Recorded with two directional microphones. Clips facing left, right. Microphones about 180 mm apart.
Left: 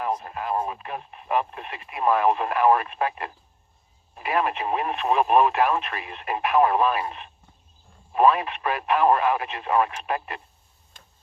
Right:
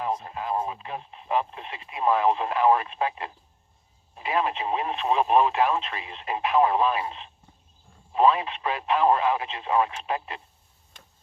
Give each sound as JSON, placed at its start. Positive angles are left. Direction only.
{"t": 0.0, "sound": "speech", "side_deg": -20}